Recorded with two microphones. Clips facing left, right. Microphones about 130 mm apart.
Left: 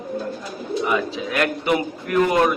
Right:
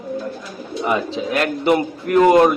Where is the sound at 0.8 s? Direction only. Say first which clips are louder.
Right 5 dB; 30° right (ahead or behind).